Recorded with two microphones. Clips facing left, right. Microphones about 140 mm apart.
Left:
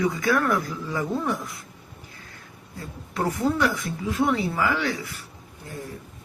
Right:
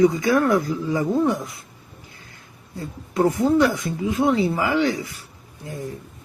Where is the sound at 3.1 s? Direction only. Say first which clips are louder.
Right 6 dB; 20° right (ahead or behind).